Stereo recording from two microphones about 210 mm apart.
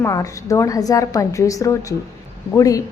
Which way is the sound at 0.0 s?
15° left (ahead or behind).